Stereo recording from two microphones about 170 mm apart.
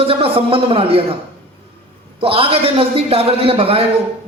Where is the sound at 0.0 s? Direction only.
35° right (ahead or behind).